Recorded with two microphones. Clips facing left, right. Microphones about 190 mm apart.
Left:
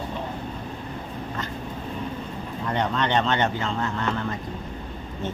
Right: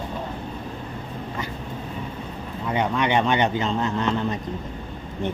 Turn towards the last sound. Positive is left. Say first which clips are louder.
# right 4 dB
turn(degrees=-15)  # may be behind; listen again after turning